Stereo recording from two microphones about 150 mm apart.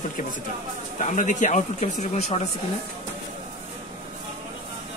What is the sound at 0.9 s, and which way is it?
Speech, 55° left (ahead or behind).